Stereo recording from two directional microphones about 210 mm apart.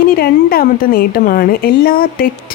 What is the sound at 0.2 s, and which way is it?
A woman's voice, 45° left (ahead or behind).